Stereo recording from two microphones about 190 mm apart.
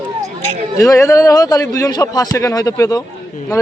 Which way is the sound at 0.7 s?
15° left (ahead or behind).